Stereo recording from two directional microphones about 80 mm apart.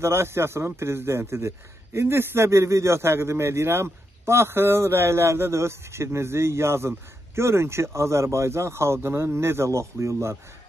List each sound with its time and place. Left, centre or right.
0.0 s speech: right